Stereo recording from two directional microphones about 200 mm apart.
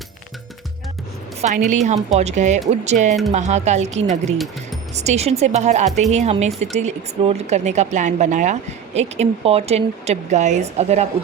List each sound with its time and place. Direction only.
1.4 s speech: 35° right (ahead or behind)